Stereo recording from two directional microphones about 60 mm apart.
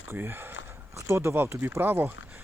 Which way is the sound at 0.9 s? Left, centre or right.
Right.